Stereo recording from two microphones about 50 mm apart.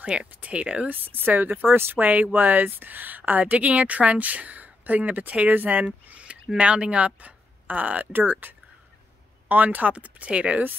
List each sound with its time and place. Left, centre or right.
0.0 s speech: right
0.8 s a woman's voice: right